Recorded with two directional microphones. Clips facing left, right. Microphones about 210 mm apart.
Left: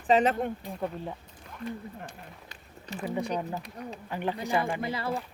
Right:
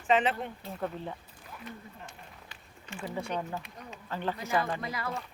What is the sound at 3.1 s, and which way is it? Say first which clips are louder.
A woman's voice: left 4 dB; 15° left (ahead or behind).